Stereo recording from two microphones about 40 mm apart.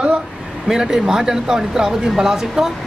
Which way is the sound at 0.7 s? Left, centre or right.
Centre.